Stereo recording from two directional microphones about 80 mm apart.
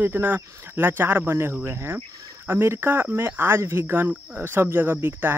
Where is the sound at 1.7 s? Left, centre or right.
Right.